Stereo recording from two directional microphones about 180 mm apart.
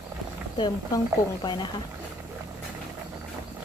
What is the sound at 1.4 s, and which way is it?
Mantra, 25° left (ahead or behind).